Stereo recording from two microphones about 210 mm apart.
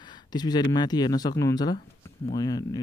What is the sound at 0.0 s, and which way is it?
Speech, 20° left (ahead or behind).